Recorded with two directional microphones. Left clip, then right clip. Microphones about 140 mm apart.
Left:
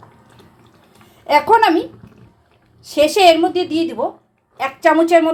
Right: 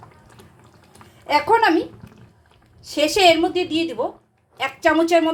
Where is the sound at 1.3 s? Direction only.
20° left (ahead or behind).